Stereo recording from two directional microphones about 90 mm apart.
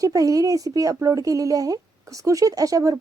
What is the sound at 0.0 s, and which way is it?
A woman's voice, 40° right (ahead or behind).